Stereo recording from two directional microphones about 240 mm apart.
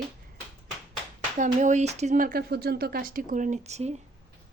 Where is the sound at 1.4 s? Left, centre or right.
Right.